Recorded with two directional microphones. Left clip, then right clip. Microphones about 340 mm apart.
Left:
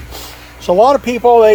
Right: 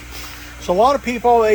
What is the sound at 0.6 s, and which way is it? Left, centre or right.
Speech, left.